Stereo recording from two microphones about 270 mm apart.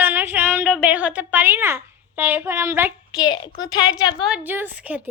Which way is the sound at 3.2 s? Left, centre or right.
Centre.